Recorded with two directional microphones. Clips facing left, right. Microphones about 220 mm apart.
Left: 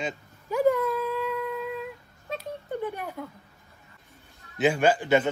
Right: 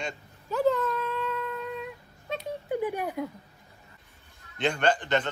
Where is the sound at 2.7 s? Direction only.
15° right (ahead or behind).